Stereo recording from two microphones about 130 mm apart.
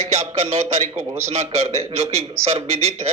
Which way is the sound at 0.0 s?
55° right (ahead or behind).